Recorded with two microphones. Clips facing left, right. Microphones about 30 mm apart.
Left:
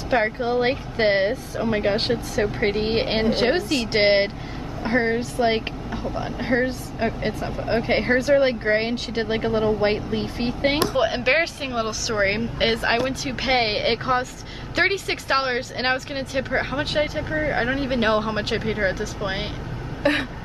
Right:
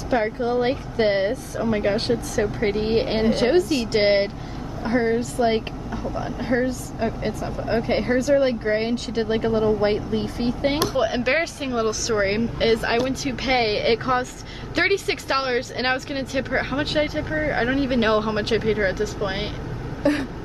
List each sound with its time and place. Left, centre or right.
0.1 s speech: left
12.6 s speech: left
13.1 s speech: centre
20.0 s vehicle: left